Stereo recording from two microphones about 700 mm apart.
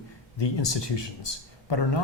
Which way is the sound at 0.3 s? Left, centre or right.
Left.